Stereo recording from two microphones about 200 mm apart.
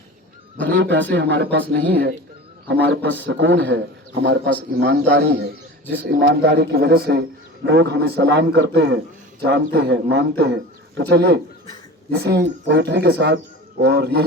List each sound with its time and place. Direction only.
0.8 s a man's voice: 60° right (ahead or behind)